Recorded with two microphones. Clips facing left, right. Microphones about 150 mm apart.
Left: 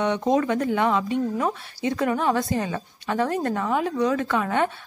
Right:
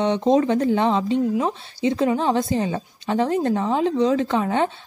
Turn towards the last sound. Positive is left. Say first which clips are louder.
# right 2 dB
turn(degrees=-25)  # may be behind; listen again after turning